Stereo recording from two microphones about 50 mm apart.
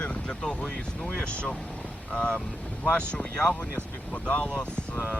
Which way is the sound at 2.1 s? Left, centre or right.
Left.